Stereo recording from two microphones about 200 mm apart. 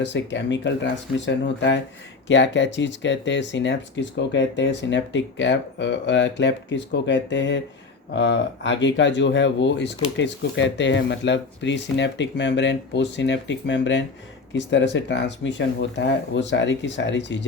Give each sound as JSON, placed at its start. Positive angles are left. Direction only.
{"t": 0.0, "sound": "speech", "side_deg": 60}